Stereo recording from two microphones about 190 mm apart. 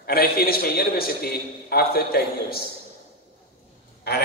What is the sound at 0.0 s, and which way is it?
A man's voice, 50° left (ahead or behind).